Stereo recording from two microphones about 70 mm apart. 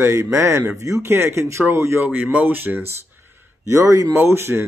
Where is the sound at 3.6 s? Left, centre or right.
Right.